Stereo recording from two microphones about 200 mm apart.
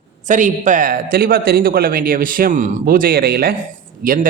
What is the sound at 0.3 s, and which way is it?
A man's voice, 40° right (ahead or behind).